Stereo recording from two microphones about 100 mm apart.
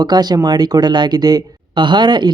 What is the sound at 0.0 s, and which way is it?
Speech, 45° right (ahead or behind).